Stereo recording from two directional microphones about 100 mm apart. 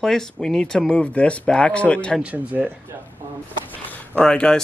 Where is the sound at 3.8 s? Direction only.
10° left (ahead or behind).